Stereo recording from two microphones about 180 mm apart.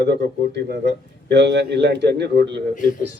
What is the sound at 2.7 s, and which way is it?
Speech, 45° left (ahead or behind).